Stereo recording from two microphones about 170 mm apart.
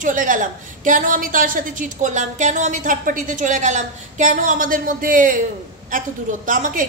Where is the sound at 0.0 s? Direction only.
50° right (ahead or behind).